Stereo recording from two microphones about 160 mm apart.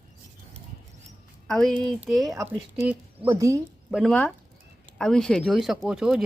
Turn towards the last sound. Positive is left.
turn(degrees=-5)  # may be behind; listen again after turning